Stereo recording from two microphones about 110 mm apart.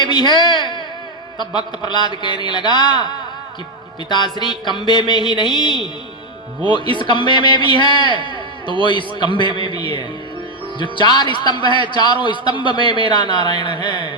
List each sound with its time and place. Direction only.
0.0 s speech: 45° left (ahead or behind)
4.1 s speech: 45° left (ahead or behind)
8.3 s a sound: 50° right (ahead or behind)
8.8 s speech: 45° left (ahead or behind)
9.7 s speech: 55° right (ahead or behind)
10.8 s speech: 45° left (ahead or behind)